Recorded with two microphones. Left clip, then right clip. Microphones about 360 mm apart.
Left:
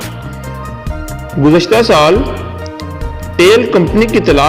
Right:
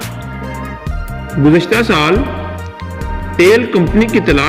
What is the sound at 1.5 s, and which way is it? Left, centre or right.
Music, centre.